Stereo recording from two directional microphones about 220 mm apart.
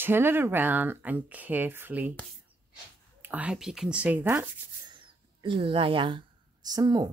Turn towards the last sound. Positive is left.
turn(degrees=-20)  # may be behind; listen again after turning